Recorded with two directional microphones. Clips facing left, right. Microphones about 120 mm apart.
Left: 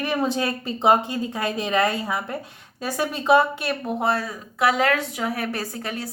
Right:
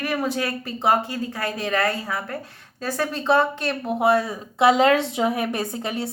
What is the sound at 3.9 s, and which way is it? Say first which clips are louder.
Speech: right 6 dB; 10° right (ahead or behind).